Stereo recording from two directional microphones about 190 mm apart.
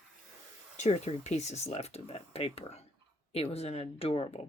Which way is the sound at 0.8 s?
35° left (ahead or behind).